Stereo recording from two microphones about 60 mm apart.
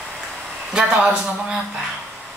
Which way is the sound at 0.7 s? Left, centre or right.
Centre.